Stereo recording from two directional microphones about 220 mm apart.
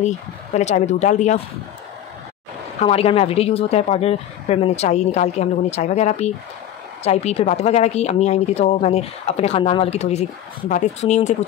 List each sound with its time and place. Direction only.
0.0 s speech: 30° left (ahead or behind)
2.8 s speech: 25° left (ahead or behind)